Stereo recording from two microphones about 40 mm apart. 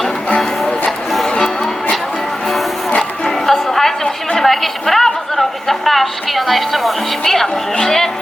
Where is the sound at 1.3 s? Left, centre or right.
Left.